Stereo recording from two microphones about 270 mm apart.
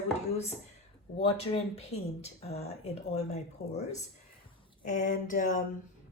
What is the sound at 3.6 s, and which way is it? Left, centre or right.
Speech, left.